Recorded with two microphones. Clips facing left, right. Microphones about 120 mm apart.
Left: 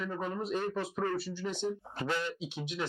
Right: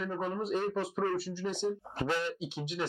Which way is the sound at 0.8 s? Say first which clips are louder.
Right 2 dB; 40° right (ahead or behind).